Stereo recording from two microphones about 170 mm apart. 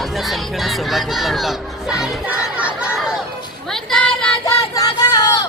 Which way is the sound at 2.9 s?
5° right (ahead or behind).